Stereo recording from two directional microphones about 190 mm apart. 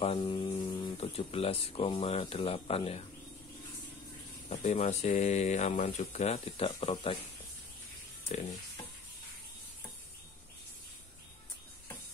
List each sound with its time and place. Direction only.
0.0 s speech: 30° left (ahead or behind)
4.5 s speech: 35° left (ahead or behind)